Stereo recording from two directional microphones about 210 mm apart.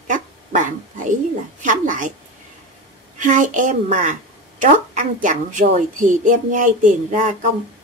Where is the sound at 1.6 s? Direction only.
35° right (ahead or behind).